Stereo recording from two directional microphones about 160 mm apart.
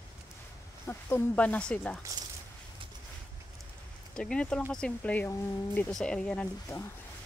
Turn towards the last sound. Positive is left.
turn(degrees=20)  # may be behind; listen again after turning